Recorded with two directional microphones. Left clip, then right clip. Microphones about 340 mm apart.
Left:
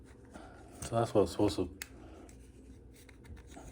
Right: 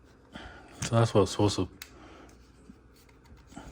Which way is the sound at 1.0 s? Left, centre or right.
Right.